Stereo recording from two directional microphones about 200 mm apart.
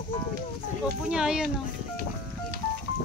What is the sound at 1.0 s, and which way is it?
Speech, 5° right (ahead or behind).